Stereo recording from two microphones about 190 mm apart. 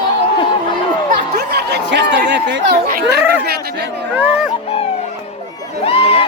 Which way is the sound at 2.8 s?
55° right (ahead or behind).